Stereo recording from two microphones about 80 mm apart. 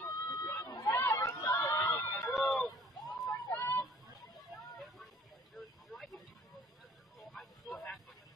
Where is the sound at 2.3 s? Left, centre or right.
Centre.